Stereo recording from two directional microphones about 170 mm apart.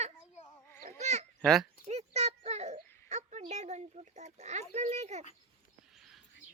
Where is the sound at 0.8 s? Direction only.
45° right (ahead or behind).